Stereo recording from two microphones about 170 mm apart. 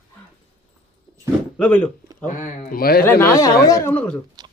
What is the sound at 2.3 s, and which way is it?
Speech, 50° left (ahead or behind).